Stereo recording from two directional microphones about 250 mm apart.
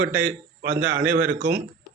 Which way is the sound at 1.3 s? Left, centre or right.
Right.